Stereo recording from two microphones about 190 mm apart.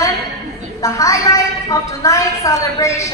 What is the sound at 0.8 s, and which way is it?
A woman's voice, 15° left (ahead or behind).